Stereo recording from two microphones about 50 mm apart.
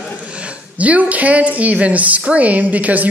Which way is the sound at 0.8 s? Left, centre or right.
Right.